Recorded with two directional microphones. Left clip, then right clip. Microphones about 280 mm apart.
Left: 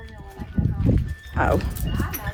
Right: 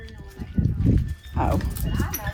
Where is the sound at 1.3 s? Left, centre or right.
Left.